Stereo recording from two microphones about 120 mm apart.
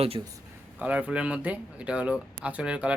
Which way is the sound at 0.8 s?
10° right (ahead or behind).